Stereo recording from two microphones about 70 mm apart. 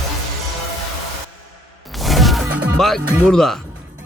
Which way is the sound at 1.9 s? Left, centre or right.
Centre.